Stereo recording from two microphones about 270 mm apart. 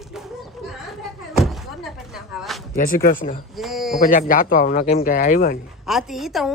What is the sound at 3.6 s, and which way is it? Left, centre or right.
Speech, centre.